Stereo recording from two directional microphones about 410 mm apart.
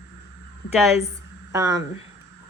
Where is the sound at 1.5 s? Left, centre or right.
Centre.